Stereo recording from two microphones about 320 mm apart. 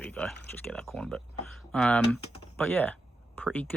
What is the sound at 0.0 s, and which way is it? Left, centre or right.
Speech, centre.